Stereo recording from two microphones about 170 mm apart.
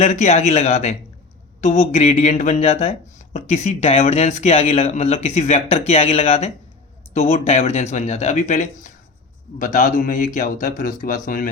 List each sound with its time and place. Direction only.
0.0 s a man's voice: 40° left (ahead or behind)